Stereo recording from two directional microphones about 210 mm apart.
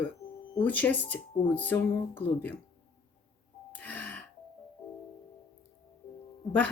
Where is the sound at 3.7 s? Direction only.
10° left (ahead or behind).